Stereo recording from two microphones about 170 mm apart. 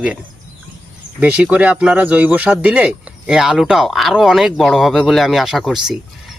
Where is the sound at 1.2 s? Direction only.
10° right (ahead or behind).